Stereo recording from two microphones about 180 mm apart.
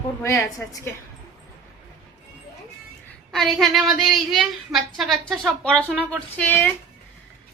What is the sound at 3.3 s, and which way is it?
A woman's voice, centre (ahead or behind).